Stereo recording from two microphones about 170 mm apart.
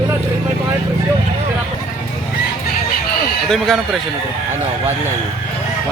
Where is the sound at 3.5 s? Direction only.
Centre (ahead or behind).